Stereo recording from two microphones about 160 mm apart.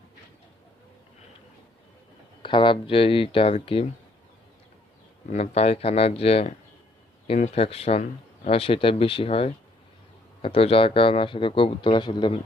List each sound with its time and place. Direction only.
2.4 s speech: 30° left (ahead or behind)
5.3 s speech: 45° left (ahead or behind); by 12.4 s 30° left (ahead or behind)